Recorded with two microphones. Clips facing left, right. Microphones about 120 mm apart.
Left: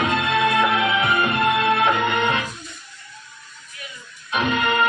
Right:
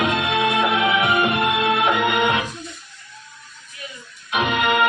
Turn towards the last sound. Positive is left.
turn(degrees=-15)  # may be behind; listen again after turning